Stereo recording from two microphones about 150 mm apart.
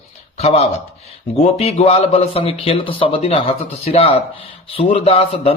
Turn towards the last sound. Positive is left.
turn(degrees=40)  # may be behind; listen again after turning